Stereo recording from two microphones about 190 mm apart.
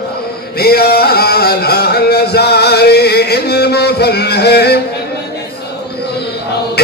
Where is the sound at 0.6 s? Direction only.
55° left (ahead or behind).